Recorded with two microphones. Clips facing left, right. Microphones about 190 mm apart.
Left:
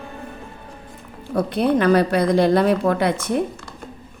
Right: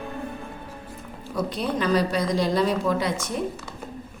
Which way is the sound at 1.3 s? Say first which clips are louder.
Left 8 dB; 60° left (ahead or behind).